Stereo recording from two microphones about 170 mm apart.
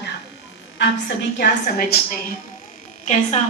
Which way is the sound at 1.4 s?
65° left (ahead or behind).